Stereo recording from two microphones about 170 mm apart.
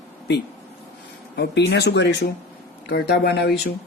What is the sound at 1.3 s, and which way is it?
Speech, 85° left.